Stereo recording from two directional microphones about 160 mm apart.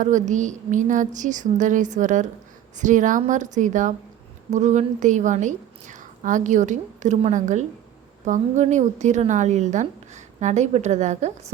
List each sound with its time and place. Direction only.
0.0 s a woman's voice: 50° right (ahead or behind)